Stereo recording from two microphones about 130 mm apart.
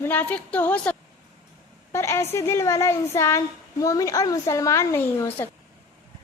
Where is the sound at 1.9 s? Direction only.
20° left (ahead or behind).